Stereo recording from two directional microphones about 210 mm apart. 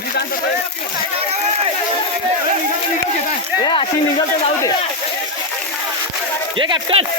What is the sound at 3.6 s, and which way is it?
Speech, 25° left (ahead or behind).